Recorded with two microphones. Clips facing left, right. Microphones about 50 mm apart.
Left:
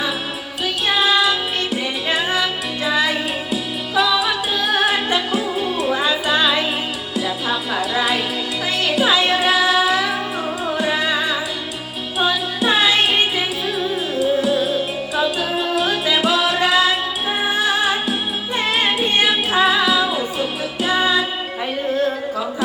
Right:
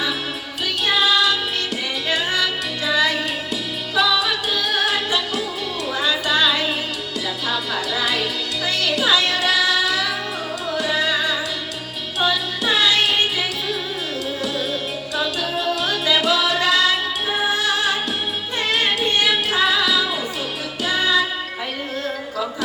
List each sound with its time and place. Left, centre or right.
0.9 s music: centre